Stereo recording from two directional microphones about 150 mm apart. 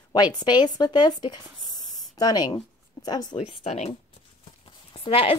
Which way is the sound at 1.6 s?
25° left (ahead or behind).